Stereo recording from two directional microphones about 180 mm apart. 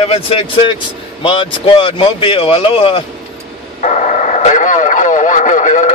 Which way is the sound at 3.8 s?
40° left (ahead or behind).